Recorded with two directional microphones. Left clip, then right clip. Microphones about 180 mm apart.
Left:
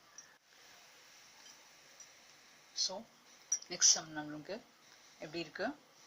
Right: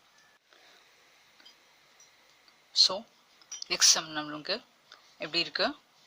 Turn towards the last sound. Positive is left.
turn(degrees=-50)  # may be behind; listen again after turning